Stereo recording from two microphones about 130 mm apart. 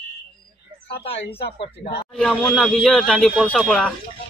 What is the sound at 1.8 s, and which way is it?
Speech, 90° left.